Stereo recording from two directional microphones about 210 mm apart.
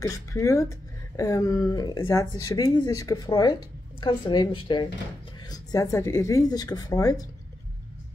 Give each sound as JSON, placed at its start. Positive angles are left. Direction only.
{"t": 0.0, "sound": "a woman's voice", "side_deg": 15}